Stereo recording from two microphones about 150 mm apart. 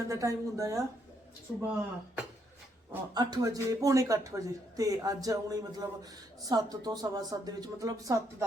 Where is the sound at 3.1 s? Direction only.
25° right (ahead or behind).